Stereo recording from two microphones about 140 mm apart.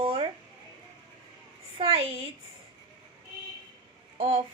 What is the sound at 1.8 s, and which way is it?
Speech, 40° right (ahead or behind).